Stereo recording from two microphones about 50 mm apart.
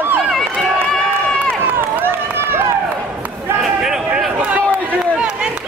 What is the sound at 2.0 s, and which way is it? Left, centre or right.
Run, right.